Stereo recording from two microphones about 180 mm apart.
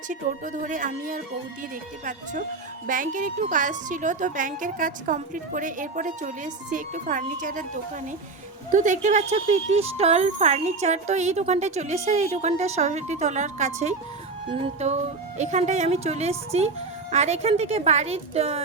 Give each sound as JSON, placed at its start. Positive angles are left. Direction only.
{"t": 0.1, "sound": "a woman's voice", "side_deg": -45}
{"t": 2.8, "sound": "a woman's voice", "side_deg": -50}
{"t": 8.7, "sound": "speech", "side_deg": -45}